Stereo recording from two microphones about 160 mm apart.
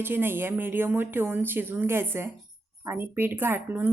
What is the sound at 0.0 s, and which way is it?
A woman's voice, 15° right (ahead or behind).